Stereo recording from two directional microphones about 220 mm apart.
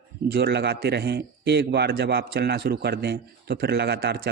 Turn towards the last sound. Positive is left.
turn(degrees=-45)  # may be behind; listen again after turning